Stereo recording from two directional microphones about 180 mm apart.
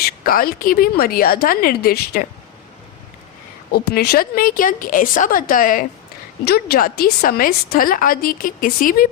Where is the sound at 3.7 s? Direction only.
60° left (ahead or behind).